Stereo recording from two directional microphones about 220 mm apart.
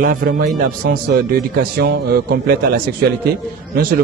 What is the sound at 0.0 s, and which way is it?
A man's voice, 40° right (ahead or behind).